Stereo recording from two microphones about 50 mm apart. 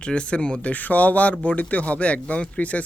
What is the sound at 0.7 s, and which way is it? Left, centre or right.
Speech, left.